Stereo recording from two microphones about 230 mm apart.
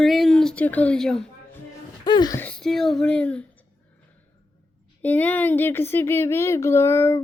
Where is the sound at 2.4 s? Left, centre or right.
Centre.